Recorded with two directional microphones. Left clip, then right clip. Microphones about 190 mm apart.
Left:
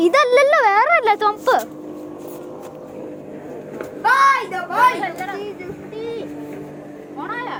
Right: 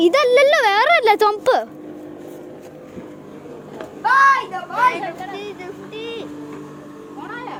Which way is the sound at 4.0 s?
50° left (ahead or behind).